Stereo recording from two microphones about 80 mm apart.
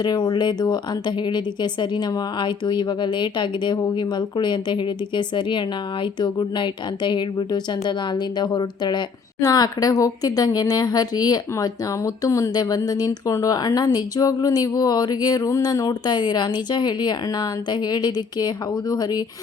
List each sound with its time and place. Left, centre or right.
0.0 s speech: left
9.4 s speech: left